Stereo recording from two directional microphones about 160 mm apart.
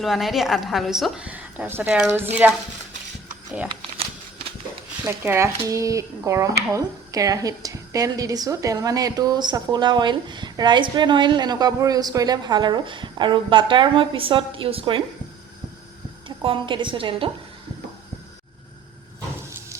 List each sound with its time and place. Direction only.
0.0 s a woman's voice: centre (ahead or behind)
3.7 s a sound: 35° right (ahead or behind)
5.0 s a woman's voice: 15° right (ahead or behind); by 15.0 s 35° right (ahead or behind)
16.4 s a woman's voice: 35° right (ahead or behind)